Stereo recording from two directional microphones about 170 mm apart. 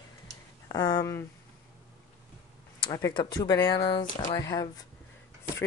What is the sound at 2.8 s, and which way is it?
Speech, 20° left (ahead or behind).